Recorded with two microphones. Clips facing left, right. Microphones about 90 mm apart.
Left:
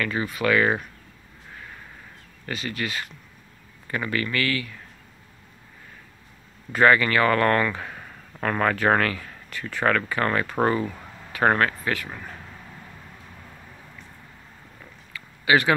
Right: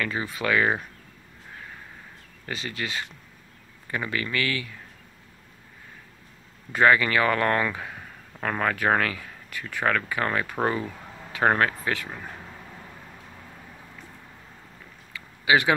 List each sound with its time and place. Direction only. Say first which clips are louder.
0.0 s speech: left 3 dB; 20° right (ahead or behind)
2.5 s speech: left 2 dB; 25° right (ahead or behind)
6.7 s speech: left 1 dB; 15° right (ahead or behind)
11.3 s speech: left 1 dB; 15° right (ahead or behind)
15.1 s a sound: left 1 dB; 15° right (ahead or behind)